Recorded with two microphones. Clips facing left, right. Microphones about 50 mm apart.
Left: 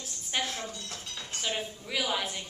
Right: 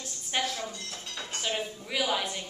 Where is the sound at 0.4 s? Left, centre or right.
Left.